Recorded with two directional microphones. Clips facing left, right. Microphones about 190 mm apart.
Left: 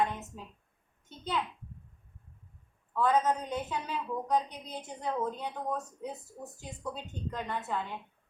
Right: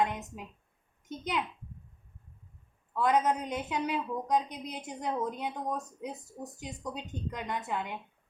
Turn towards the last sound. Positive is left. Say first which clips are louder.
# right 1 dB
turn(degrees=-15)  # may be behind; listen again after turning